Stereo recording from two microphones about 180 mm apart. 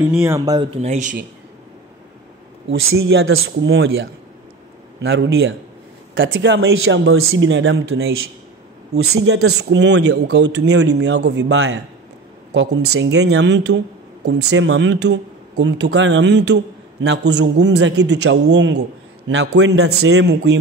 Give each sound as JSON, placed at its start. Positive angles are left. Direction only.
{"t": 0.2, "sound": "speech", "side_deg": -15}
{"t": 0.6, "sound": "speech", "side_deg": -35}
{"t": 2.7, "sound": "speech", "side_deg": -80}
{"t": 5.0, "sound": "a man's voice", "side_deg": -65}
{"t": 6.1, "sound": "speech", "side_deg": -90}
{"t": 8.9, "sound": "speech", "side_deg": -70}